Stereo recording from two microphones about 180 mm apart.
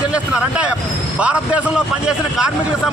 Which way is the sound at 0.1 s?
5° right (ahead or behind).